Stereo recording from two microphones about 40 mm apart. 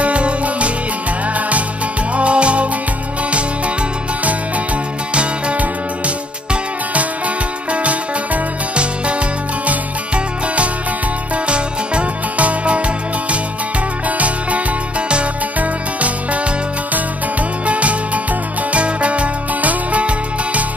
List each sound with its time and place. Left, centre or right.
0.0 s music: right
2.1 s music: right
5.1 s music: right
9.7 s music: right
17.6 s music: right